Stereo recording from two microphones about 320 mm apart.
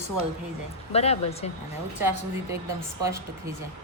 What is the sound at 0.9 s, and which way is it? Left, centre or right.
Speech, centre.